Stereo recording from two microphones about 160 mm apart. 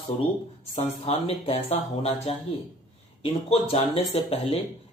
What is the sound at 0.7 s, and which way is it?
Speech, 40° left (ahead or behind).